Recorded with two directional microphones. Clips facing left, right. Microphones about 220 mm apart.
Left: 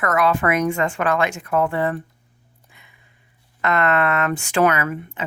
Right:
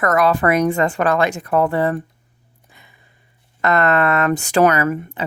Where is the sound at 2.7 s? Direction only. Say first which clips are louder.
Right 5 dB; 35° right (ahead or behind).